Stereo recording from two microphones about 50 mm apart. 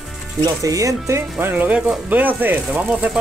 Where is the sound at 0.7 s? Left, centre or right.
Right.